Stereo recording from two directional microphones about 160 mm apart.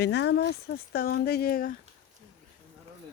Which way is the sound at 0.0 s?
90° left.